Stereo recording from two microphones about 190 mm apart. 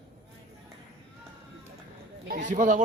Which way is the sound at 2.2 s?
45° right (ahead or behind).